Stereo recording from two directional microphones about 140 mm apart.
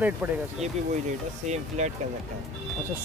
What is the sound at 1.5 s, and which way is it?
Speech, 50° right (ahead or behind).